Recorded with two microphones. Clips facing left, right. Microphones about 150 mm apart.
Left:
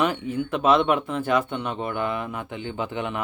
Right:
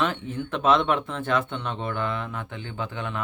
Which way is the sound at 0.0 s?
10° left (ahead or behind).